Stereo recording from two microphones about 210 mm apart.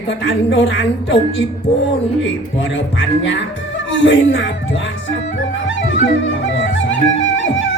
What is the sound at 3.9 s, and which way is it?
Speech, 60° left (ahead or behind).